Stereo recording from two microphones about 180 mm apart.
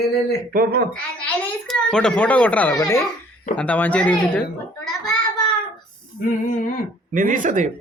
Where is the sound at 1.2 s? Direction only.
5° left (ahead or behind).